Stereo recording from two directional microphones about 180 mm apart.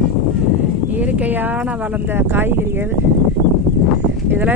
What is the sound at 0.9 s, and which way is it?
Speech, 10° right (ahead or behind).